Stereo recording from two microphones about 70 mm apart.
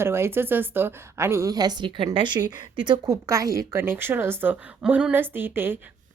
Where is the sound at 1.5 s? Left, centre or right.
Right.